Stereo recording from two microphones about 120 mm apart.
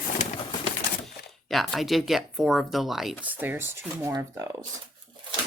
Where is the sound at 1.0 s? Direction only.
Centre (ahead or behind).